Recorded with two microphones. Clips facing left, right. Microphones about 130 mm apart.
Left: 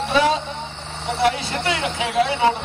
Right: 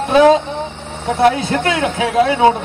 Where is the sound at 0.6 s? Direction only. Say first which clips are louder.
Right 7 dB; 45° right (ahead or behind).